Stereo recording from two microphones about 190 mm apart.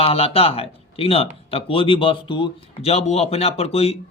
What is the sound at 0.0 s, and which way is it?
A man's voice, 30° left (ahead or behind).